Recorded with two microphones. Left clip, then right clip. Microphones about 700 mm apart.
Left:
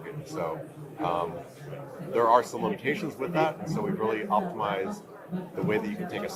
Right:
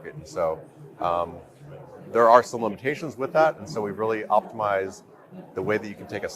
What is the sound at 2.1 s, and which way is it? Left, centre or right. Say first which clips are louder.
A man's voice: right 6 dB; right.